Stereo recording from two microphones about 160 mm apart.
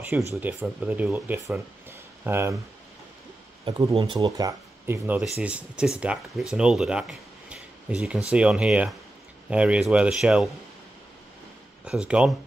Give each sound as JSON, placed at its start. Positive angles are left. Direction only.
{"t": 0.4, "sound": "speech", "side_deg": -10}
{"t": 3.9, "sound": "a man's voice", "side_deg": -35}
{"t": 11.8, "sound": "a man's voice", "side_deg": -5}